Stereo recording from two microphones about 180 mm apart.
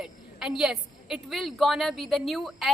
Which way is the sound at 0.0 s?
5° right (ahead or behind).